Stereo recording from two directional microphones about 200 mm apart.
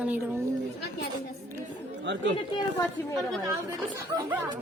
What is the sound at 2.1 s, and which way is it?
Speech, 60° right (ahead or behind).